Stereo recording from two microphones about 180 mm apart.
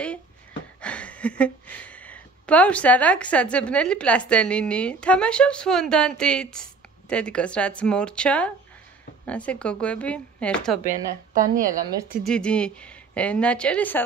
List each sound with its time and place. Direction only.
0.7 s a woman's voice: 5° left (ahead or behind)
10.9 s a woman's voice: 50° right (ahead or behind)
12.3 s a woman's voice: 5° left (ahead or behind)